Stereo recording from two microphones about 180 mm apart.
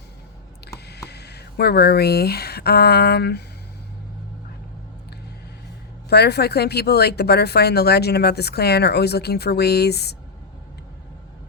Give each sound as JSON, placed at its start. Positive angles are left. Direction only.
{"t": 0.9, "sound": "speech", "side_deg": 65}
{"t": 6.1, "sound": "a woman's voice", "side_deg": 65}